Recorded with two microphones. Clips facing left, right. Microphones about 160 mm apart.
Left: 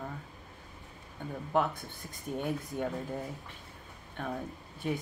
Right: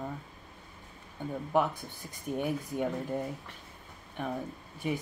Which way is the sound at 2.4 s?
10° right (ahead or behind).